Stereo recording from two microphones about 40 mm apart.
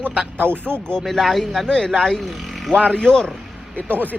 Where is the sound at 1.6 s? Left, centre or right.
Centre.